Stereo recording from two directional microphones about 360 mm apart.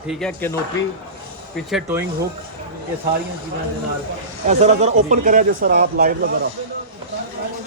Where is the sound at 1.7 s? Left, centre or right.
Centre.